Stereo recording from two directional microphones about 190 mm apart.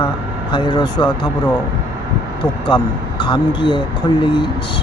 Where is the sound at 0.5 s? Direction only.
25° left (ahead or behind).